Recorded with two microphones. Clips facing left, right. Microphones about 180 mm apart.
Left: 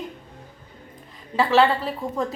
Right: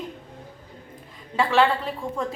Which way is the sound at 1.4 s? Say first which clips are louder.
Left 2 dB; centre (ahead or behind).